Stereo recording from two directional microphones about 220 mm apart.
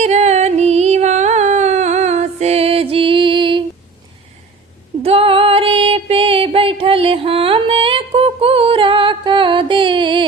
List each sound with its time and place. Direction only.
0.0 s music: 30° right (ahead or behind)
5.0 s female singing: 25° right (ahead or behind)